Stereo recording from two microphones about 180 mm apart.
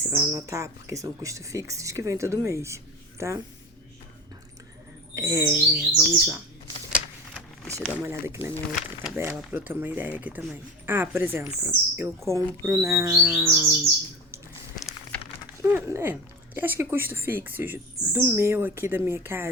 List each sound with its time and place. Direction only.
0.0 s speech: 15° right (ahead or behind)
5.1 s speech: 20° right (ahead or behind)
7.6 s speech: centre (ahead or behind)
8.0 s speech: 15° right (ahead or behind)
15.6 s speech: 10° right (ahead or behind)